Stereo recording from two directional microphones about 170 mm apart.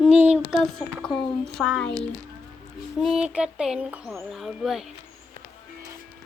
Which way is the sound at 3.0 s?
5° right (ahead or behind).